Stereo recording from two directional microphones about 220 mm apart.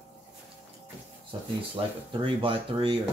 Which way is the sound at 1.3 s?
25° right (ahead or behind).